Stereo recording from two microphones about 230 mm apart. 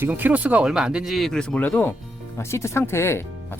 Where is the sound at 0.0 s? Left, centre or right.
Centre.